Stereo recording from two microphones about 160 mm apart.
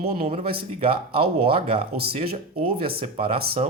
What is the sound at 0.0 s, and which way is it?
Speech, 40° right (ahead or behind).